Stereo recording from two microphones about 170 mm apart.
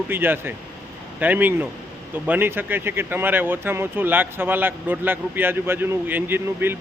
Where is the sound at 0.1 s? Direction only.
10° right (ahead or behind).